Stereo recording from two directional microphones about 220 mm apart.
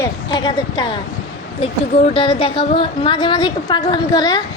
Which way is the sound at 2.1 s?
25° left (ahead or behind).